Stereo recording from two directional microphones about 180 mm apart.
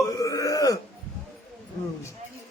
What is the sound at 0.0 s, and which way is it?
Burping, 20° left (ahead or behind).